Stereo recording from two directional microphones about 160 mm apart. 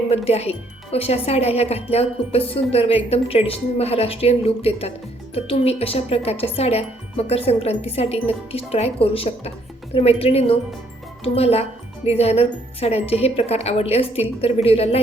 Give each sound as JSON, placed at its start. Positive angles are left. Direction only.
{"t": 0.1, "sound": "speech", "side_deg": 40}